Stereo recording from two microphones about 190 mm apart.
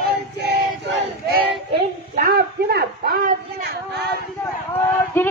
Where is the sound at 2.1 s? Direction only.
50° right (ahead or behind).